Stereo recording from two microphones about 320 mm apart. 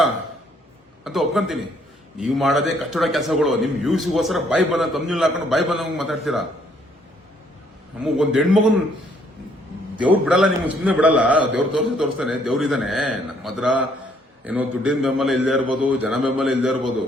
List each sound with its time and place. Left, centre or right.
1.0 s a man's voice: centre
7.9 s a man's voice: centre
10.2 s a man's voice: centre